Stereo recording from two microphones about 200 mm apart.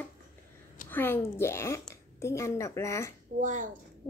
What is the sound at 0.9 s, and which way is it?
A woman's voice, 10° left (ahead or behind).